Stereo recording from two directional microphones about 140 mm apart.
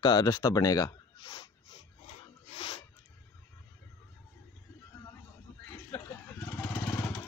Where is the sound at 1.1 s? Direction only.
35° left (ahead or behind).